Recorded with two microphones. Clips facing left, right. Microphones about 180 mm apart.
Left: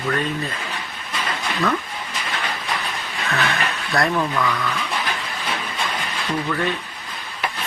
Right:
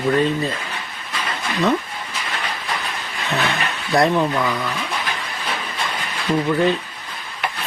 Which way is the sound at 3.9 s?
20° right (ahead or behind).